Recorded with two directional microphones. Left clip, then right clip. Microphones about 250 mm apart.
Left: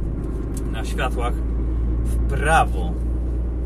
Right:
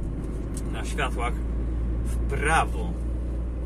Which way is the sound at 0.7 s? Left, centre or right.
Left.